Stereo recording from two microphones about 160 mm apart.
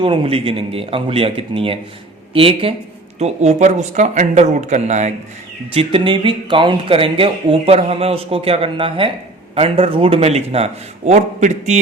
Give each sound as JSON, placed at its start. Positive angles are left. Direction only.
{"t": 0.0, "sound": "speech", "side_deg": -35}
{"t": 5.7, "sound": "speech", "side_deg": -35}